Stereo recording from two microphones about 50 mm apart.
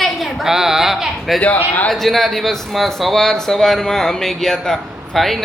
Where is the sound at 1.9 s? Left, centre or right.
Centre.